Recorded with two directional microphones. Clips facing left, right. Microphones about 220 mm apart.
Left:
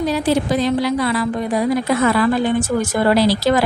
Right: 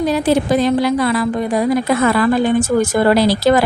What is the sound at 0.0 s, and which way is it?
A woman's voice, 50° right (ahead or behind).